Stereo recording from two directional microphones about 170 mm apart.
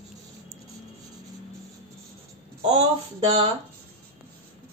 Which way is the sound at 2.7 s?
35° right (ahead or behind).